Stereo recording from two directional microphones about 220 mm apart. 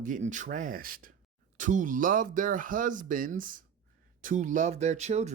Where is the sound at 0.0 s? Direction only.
35° right (ahead or behind).